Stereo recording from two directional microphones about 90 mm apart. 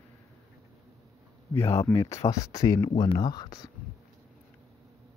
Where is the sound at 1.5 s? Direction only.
30° left (ahead or behind).